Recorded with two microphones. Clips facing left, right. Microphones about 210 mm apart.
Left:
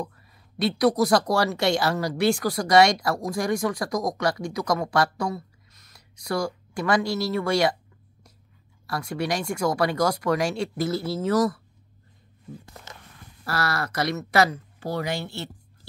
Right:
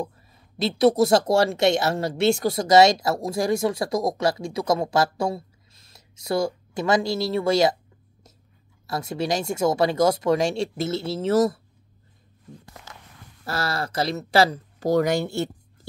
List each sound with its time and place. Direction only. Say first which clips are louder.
0.6 s speech: right 3 dB; 25° right (ahead or behind)
8.8 s speech: right 2 dB; 25° right (ahead or behind)
13.5 s speech: even; 25° right (ahead or behind); by 15.5 s 45° right (ahead or behind)